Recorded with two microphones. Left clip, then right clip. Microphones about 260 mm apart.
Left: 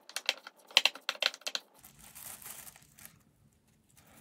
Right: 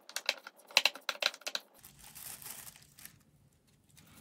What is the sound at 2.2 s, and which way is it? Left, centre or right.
Crumpling, centre.